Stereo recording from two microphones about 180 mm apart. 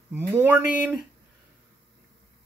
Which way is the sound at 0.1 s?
10° right (ahead or behind).